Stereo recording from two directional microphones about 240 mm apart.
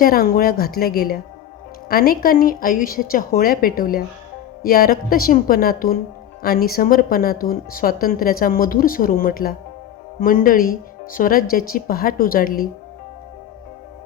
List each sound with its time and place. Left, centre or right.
0.0 s speech: left